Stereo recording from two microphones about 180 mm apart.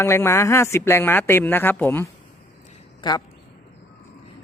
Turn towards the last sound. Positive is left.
turn(degrees=25)  # may be behind; listen again after turning